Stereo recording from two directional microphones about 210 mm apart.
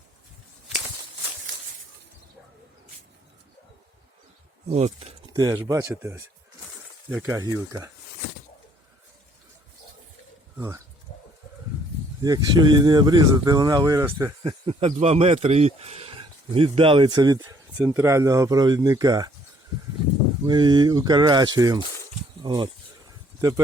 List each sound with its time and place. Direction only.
4.7 s speech: 30° right (ahead or behind)
12.2 s speech: 20° right (ahead or behind)
14.7 s speech: 30° right (ahead or behind)
20.5 s speech: 20° right (ahead or behind)